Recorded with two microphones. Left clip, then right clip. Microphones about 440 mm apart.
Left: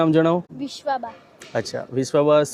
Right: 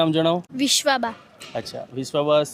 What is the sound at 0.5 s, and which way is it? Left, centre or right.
Speech, right.